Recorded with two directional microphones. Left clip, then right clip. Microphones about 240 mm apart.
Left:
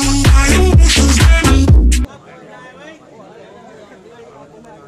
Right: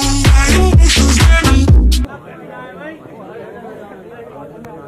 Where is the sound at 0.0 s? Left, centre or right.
Centre.